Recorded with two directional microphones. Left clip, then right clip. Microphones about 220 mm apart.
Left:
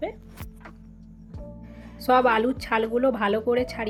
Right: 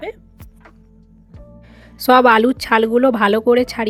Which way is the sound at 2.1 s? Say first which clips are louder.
Right 9 dB; 55° right (ahead or behind).